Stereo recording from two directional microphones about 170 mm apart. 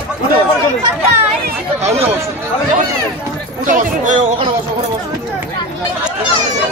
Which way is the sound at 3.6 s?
50° right (ahead or behind).